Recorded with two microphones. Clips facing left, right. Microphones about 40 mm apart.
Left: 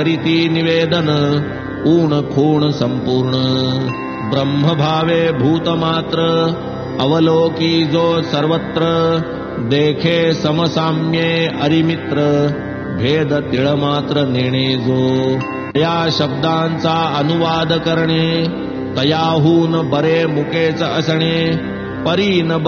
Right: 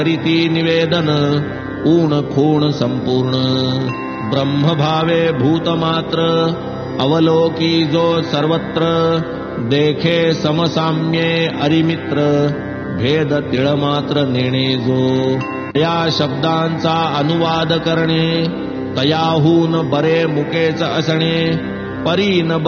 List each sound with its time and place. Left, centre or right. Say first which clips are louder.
0.0 s mantra: even; centre
13.3 s mantra: even; centre